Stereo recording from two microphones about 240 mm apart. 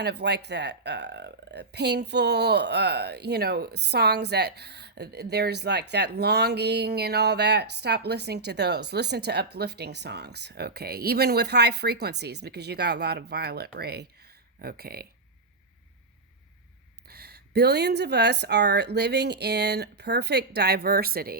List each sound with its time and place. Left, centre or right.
0.0 s speech: right
17.1 s speech: right